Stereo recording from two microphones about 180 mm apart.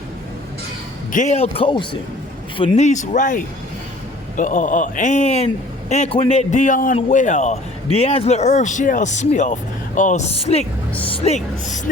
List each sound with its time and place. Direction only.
1.1 s a man's voice: 40° left (ahead or behind)
2.6 s a man's voice: 40° left (ahead or behind)